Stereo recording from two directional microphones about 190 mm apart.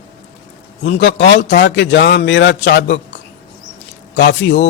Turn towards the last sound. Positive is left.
turn(degrees=65)  # may be behind; listen again after turning